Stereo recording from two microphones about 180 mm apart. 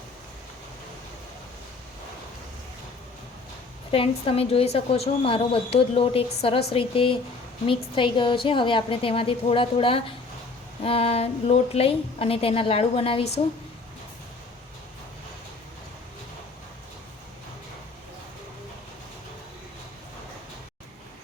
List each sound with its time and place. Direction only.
3.9 s a woman's voice: 30° left (ahead or behind)